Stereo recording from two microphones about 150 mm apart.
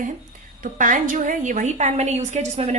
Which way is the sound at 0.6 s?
60° right (ahead or behind).